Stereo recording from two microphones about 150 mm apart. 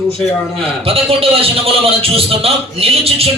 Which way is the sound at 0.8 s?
40° right (ahead or behind).